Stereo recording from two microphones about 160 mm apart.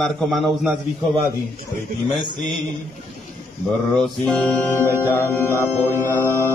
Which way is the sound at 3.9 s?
5° left (ahead or behind).